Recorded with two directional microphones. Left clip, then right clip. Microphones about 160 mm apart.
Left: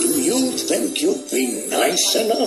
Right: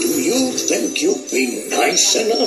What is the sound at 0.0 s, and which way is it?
Jingle bell, 15° left (ahead or behind).